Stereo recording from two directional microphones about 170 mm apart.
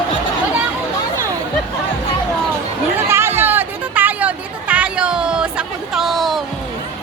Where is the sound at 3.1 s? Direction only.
15° right (ahead or behind).